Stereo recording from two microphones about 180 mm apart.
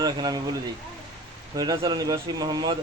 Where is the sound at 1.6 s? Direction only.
20° right (ahead or behind).